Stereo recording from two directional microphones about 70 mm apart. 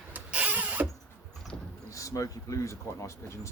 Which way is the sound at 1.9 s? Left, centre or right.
Left.